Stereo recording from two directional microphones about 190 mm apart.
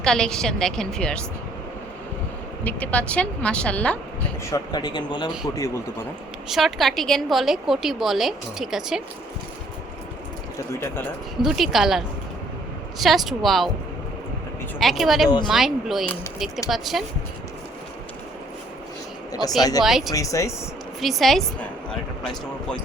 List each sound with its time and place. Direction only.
0.0 s a woman's voice: 5° left (ahead or behind)
2.6 s speech: 10° left (ahead or behind)
4.5 s speech: 20° left (ahead or behind)
6.5 s a woman's voice: centre (ahead or behind)
10.8 s speech: 10° left (ahead or behind)
11.4 s a woman's voice: centre (ahead or behind)
14.8 s a woman's voice: centre (ahead or behind)
19.3 s speech: 20° left (ahead or behind)
19.8 s a woman's voice: centre (ahead or behind)
20.1 s speech: 15° left (ahead or behind)
21.0 s a woman's voice: centre (ahead or behind)